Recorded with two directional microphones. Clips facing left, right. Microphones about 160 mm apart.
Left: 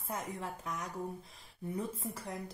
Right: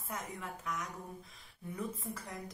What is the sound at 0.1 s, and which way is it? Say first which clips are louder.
Speech: left 3 dB; 30° left (ahead or behind).